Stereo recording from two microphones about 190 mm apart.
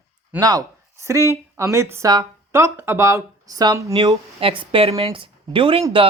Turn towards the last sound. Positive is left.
turn(degrees=-30)  # may be behind; listen again after turning